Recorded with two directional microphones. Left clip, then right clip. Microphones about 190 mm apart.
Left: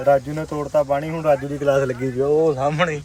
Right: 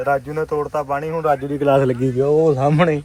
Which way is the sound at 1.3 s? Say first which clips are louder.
Right 1 dB; 60° right (ahead or behind).